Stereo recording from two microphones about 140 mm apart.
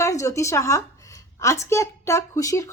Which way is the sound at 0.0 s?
20° left (ahead or behind).